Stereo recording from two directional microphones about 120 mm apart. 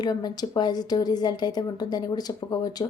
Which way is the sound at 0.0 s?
35° left (ahead or behind).